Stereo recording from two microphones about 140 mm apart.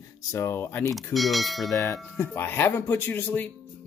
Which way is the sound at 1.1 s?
Centre (ahead or behind).